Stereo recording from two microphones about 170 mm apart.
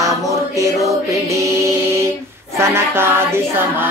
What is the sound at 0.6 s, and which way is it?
Music, 20° right (ahead or behind).